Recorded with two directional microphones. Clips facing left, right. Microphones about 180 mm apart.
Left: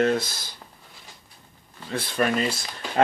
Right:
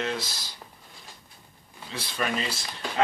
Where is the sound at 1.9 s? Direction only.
50° left (ahead or behind).